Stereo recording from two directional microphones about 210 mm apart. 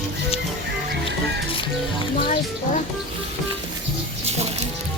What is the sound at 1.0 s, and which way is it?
Music, 25° left (ahead or behind).